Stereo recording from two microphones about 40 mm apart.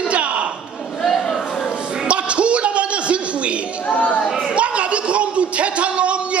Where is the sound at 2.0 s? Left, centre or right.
Right.